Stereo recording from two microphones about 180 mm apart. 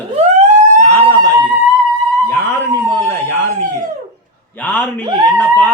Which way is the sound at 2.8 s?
10° left (ahead or behind).